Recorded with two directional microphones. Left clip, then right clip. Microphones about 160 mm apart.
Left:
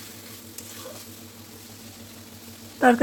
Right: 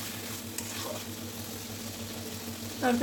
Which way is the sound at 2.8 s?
40° left (ahead or behind).